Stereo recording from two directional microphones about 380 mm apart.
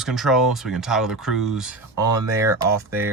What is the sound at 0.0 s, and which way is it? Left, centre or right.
Speech, centre.